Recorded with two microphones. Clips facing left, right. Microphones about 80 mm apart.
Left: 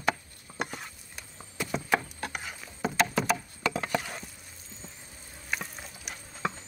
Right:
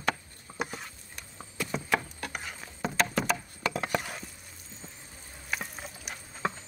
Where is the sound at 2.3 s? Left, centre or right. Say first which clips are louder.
Even; centre.